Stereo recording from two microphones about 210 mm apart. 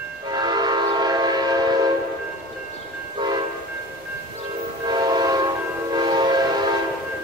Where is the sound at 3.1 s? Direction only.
20° right (ahead or behind).